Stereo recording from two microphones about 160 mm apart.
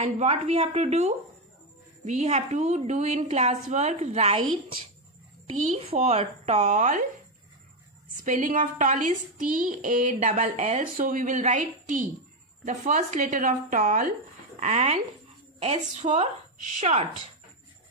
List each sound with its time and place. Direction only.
0.0 s speech: 45° right (ahead or behind)
5.9 s speech: 40° right (ahead or behind)
8.2 s speech: 55° right (ahead or behind)